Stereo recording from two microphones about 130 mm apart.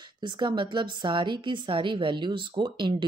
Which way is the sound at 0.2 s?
35° right (ahead or behind).